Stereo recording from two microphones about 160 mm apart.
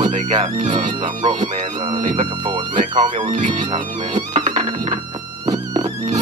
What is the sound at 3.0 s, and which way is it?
Speech, 50° right (ahead or behind).